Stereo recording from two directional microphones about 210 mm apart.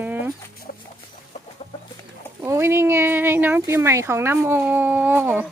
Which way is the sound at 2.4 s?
10° right (ahead or behind).